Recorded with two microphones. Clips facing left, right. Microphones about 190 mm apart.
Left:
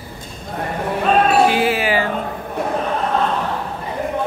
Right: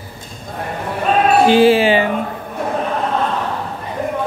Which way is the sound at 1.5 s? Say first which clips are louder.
Right 7 dB; 30° right (ahead or behind).